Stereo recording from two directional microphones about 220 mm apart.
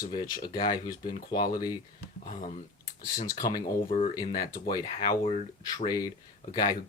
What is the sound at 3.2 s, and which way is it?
Speech, 15° left (ahead or behind).